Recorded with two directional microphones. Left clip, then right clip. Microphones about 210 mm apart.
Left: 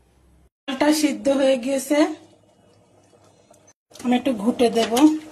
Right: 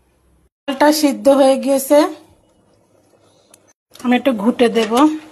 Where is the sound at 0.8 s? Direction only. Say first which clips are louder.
Right 7 dB; 25° right (ahead or behind).